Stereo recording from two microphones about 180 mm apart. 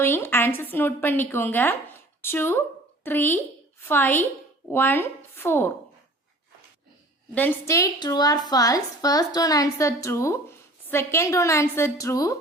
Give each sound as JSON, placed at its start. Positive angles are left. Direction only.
{"t": 0.0, "sound": "a woman's voice", "side_deg": 15}
{"t": 7.3, "sound": "a woman's voice", "side_deg": 15}